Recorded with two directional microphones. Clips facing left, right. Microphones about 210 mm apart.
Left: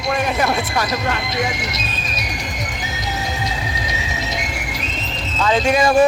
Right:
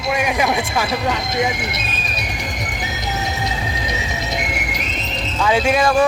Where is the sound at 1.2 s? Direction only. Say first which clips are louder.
Right 2 dB; 50° right (ahead or behind).